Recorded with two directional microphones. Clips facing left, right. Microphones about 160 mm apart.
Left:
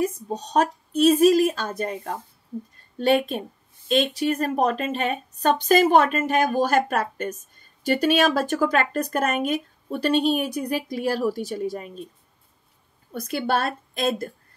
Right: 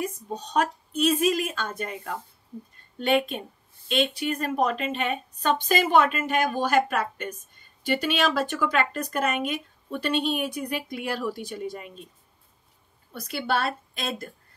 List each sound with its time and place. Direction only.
0.0 s speech: 40° left (ahead or behind)
13.1 s speech: 45° left (ahead or behind)